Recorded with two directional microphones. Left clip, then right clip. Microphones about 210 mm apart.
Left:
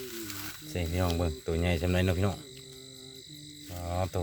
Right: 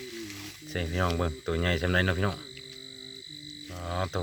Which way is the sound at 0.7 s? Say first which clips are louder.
Right 3 dB; centre (ahead or behind).